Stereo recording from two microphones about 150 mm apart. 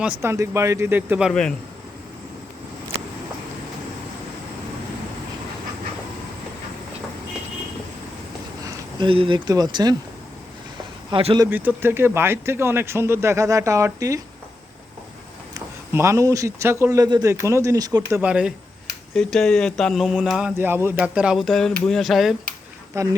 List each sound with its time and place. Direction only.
0.2 s speech: 20° right (ahead or behind)
1.3 s speech: 5° left (ahead or behind)
8.6 s a sound: 25° right (ahead or behind)
9.0 s speech: 35° right (ahead or behind)
11.1 s speech: 40° right (ahead or behind)
11.4 s speech: 15° right (ahead or behind)
15.5 s speech: 20° right (ahead or behind)
18.2 s speech: 5° right (ahead or behind)
20.6 s speech: 15° right (ahead or behind)
22.9 s speech: 20° right (ahead or behind)